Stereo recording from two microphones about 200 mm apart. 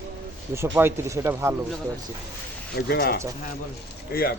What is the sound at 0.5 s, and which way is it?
Speech, 10° right (ahead or behind).